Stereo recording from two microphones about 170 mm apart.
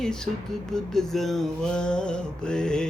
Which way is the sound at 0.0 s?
5° left (ahead or behind).